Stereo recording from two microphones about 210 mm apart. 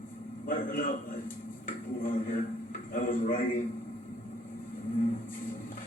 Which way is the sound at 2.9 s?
40° left (ahead or behind).